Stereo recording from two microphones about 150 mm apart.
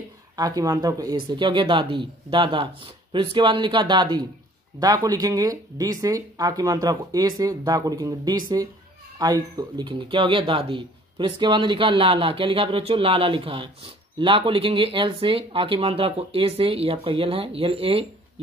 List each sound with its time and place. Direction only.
0.4 s speech: 25° right (ahead or behind)